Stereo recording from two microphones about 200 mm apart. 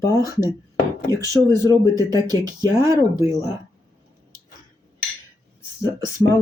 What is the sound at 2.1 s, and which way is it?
Speech, 20° right (ahead or behind).